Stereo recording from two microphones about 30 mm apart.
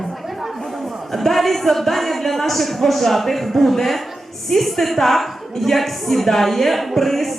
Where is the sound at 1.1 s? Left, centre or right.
Centre.